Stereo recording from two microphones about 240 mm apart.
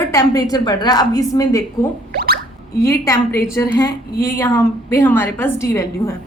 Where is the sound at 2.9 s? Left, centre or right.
Centre.